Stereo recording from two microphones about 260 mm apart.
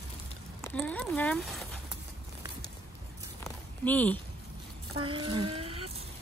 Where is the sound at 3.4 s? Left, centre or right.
Centre.